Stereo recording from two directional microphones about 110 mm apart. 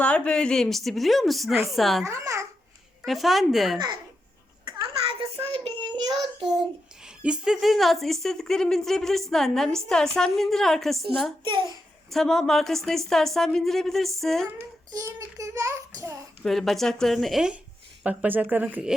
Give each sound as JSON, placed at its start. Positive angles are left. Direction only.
{"t": 0.0, "sound": "a child's voice", "side_deg": 10}
{"t": 2.0, "sound": "a child's voice", "side_deg": -30}
{"t": 3.1, "sound": "a child's voice", "side_deg": 0}
{"t": 5.2, "sound": "child singing", "side_deg": -50}
{"t": 6.1, "sound": "a child's voice", "side_deg": 0}
{"t": 14.9, "sound": "a child's voice", "side_deg": -30}
{"t": 16.4, "sound": "a child's voice", "side_deg": 0}